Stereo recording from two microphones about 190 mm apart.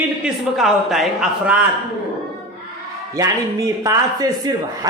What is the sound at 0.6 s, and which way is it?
A man's voice, centre (ahead or behind).